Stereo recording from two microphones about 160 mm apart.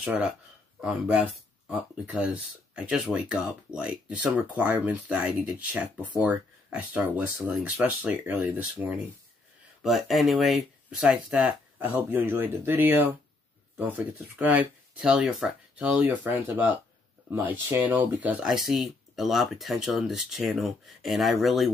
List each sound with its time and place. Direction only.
0.0 s speech: 5° right (ahead or behind)
9.8 s speech: centre (ahead or behind)